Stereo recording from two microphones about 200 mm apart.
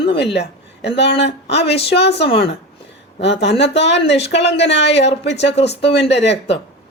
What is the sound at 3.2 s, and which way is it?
Speech, 60° left (ahead or behind).